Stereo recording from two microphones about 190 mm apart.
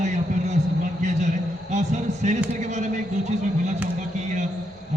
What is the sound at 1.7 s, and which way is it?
A man's voice, 40° right (ahead or behind).